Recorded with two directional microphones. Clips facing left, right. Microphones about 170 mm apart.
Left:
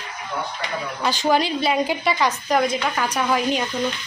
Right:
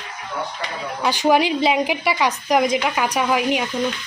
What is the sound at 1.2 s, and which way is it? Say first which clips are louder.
Speech: right 4 dB; 15° right (ahead or behind).